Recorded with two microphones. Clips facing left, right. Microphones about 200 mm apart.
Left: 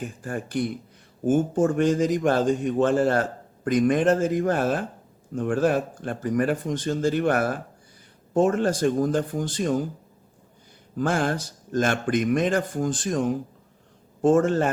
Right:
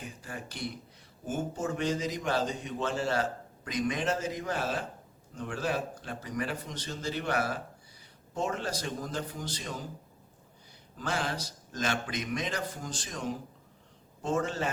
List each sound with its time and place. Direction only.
0.0 s a man's voice: 50° left (ahead or behind)
10.9 s a man's voice: 50° left (ahead or behind)